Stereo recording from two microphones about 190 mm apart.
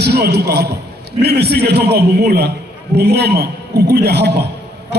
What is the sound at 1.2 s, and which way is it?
A man's voice, 60° right (ahead or behind).